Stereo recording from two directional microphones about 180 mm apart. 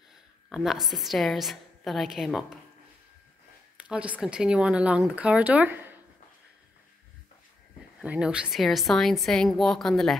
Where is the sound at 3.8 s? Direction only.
5° right (ahead or behind).